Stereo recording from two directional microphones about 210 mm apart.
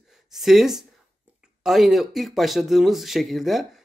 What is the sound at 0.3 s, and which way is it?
Speech, centre (ahead or behind).